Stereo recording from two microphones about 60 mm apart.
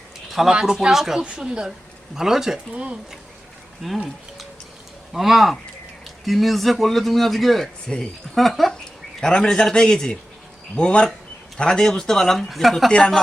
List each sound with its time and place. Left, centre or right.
0.3 s speech: centre
3.8 s speech: centre